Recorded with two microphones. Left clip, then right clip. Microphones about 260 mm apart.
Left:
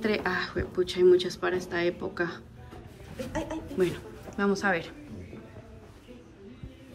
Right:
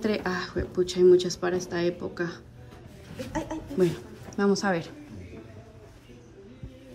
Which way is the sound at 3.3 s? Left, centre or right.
Right.